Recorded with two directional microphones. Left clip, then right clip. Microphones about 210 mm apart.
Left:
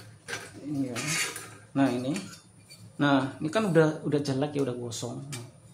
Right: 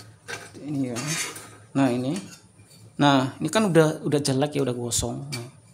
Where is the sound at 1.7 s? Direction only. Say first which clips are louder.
Right 3 dB; 50° right (ahead or behind).